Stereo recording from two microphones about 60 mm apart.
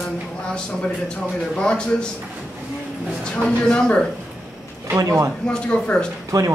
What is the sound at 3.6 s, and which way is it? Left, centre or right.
Speech, centre.